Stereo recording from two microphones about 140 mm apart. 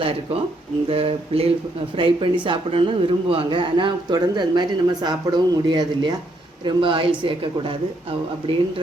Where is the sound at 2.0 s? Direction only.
35° right (ahead or behind).